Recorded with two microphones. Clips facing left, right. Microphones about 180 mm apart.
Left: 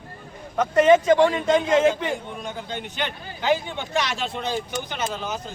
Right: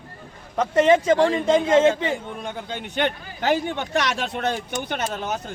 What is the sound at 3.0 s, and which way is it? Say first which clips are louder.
Speech: right 9 dB; 60° right (ahead or behind).